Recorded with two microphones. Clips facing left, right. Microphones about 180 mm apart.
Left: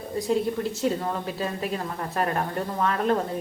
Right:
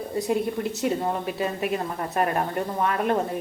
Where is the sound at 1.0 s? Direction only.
20° right (ahead or behind).